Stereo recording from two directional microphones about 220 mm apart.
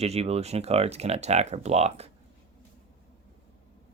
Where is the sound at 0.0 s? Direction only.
30° right (ahead or behind).